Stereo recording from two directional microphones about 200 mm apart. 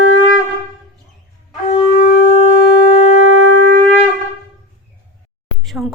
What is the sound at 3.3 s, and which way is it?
Shofar, 70° right (ahead or behind).